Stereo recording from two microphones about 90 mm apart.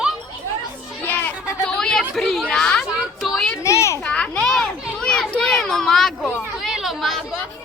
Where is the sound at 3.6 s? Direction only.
35° left (ahead or behind).